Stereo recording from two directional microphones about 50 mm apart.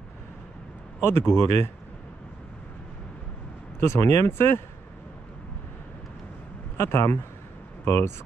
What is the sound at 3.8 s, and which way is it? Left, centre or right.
Speech, left.